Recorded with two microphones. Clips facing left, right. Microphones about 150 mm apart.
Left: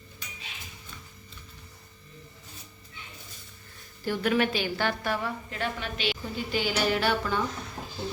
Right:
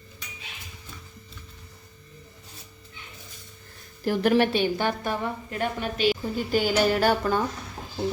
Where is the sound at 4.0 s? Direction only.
40° right (ahead or behind).